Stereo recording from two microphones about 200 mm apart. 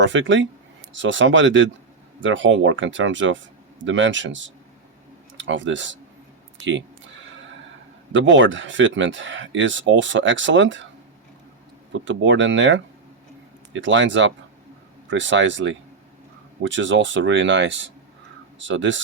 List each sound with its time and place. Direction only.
0.0 s speech: 65° right (ahead or behind)
8.1 s speech: 70° right (ahead or behind)
12.0 s speech: 70° right (ahead or behind)